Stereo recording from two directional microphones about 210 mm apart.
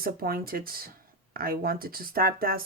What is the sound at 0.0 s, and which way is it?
Speech, 45° right (ahead or behind).